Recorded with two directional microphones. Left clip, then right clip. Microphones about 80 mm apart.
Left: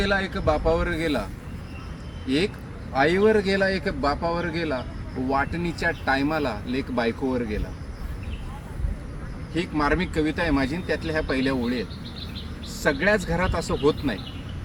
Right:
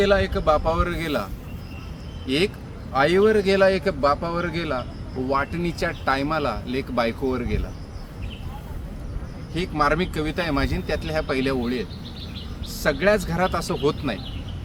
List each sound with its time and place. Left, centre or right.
0.0 s speech: centre
9.6 s speech: centre